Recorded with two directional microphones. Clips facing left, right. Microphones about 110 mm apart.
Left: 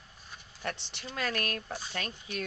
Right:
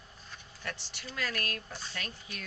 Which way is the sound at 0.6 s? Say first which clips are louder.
Left 4 dB; 25° left (ahead or behind).